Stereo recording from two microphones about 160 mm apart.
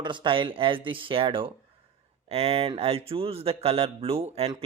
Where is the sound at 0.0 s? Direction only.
30° right (ahead or behind).